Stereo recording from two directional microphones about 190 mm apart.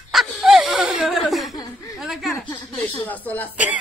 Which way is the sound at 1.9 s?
Centre (ahead or behind).